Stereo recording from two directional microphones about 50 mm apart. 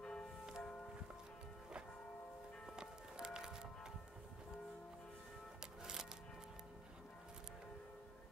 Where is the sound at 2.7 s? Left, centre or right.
Centre.